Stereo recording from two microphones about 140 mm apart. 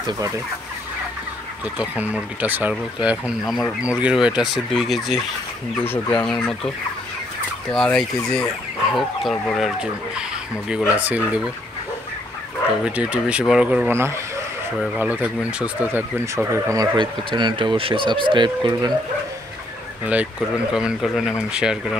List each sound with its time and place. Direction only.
1.8 s speech: 10° right (ahead or behind)
5.9 s speech: 15° left (ahead or behind)
6.2 s speech: 5° left (ahead or behind)
7.7 s speech: 5° left (ahead or behind)
12.8 s speech: 10° right (ahead or behind); by 18.9 s 30° right (ahead or behind)
20.7 s speech: 5° right (ahead or behind)